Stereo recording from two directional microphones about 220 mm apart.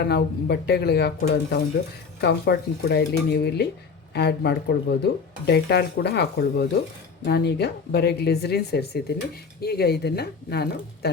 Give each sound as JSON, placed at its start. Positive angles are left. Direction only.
{"t": 0.0, "sound": "speech", "side_deg": 45}